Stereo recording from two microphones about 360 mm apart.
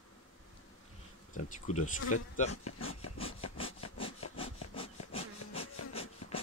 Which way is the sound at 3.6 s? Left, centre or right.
Centre.